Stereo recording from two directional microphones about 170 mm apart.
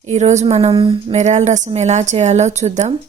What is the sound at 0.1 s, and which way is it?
Speech, 40° right (ahead or behind).